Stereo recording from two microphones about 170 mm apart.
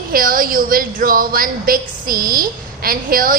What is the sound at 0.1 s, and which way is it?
A woman's voice, 55° right (ahead or behind).